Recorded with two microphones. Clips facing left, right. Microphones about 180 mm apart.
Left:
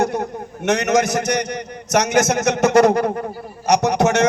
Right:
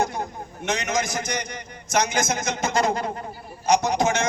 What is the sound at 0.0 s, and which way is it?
A man's voice, 65° left (ahead or behind).